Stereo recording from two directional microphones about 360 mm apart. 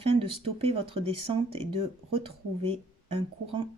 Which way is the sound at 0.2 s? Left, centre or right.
Centre.